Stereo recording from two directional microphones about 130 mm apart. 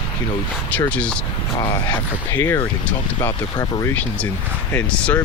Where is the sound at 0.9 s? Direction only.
10° left (ahead or behind).